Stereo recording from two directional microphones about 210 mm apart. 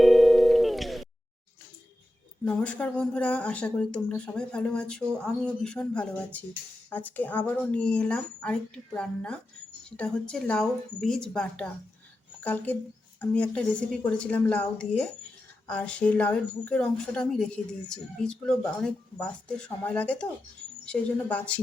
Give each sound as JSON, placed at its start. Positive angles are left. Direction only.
{"t": 0.0, "sound": "music", "side_deg": 0}
{"t": 2.4, "sound": "a woman's voice", "side_deg": 5}